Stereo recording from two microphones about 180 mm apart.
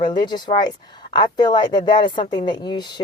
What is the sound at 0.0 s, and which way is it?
Speech, 25° left (ahead or behind).